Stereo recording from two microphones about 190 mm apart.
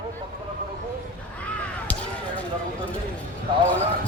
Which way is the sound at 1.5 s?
5° left (ahead or behind).